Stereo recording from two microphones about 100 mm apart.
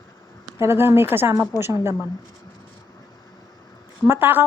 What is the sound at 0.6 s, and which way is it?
A woman's voice, 25° right (ahead or behind).